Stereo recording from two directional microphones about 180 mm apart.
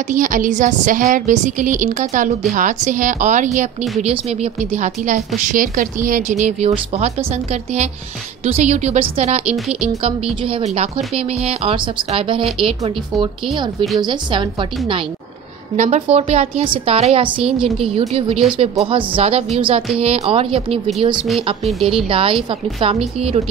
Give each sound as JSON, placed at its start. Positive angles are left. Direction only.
{"t": 0.1, "sound": "a woman's voice", "side_deg": -45}
{"t": 8.5, "sound": "a woman's voice", "side_deg": -40}
{"t": 15.7, "sound": "speech", "side_deg": -40}